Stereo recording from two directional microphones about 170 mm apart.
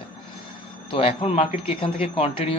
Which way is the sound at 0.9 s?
35° left (ahead or behind).